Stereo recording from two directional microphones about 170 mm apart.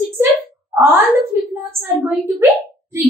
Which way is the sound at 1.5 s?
15° right (ahead or behind).